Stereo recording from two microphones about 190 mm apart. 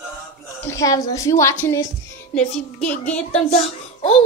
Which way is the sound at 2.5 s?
5° left (ahead or behind).